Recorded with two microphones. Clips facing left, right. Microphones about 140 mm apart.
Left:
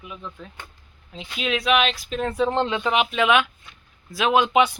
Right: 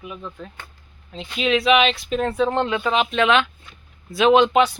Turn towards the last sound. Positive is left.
turn(degrees=10)  # may be behind; listen again after turning